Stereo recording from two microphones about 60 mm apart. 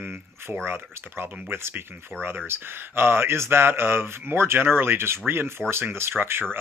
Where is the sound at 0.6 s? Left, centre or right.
Right.